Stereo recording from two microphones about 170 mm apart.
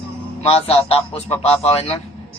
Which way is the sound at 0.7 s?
35° left (ahead or behind).